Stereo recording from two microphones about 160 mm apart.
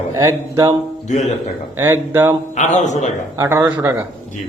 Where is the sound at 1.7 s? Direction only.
15° right (ahead or behind).